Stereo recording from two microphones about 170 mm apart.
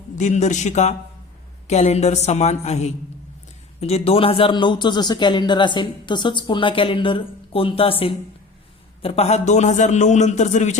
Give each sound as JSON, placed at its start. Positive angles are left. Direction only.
{"t": 0.2, "sound": "a man's voice", "side_deg": 45}